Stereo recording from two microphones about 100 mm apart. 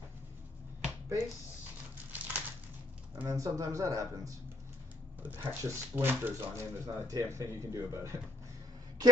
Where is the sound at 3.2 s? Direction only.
35° right (ahead or behind).